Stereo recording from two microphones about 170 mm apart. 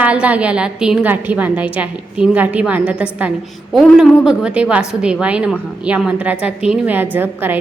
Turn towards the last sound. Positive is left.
turn(degrees=-10)  # may be behind; listen again after turning